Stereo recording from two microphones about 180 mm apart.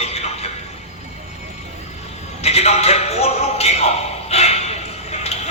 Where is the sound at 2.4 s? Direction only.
35° left (ahead or behind).